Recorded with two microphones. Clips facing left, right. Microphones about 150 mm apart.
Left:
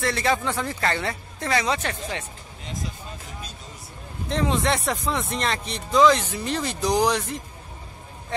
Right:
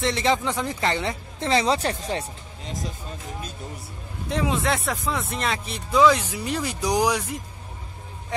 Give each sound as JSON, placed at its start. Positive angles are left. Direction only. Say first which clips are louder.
{"t": 0.0, "sound": "speech", "louder": "right 1 dB", "side_deg": -20}
{"t": 4.3, "sound": "speech", "louder": "left 1 dB", "side_deg": -5}
{"t": 8.3, "sound": "vehicle", "louder": "even", "side_deg": -10}